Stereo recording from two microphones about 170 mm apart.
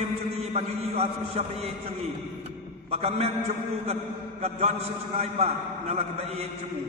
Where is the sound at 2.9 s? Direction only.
40° right (ahead or behind).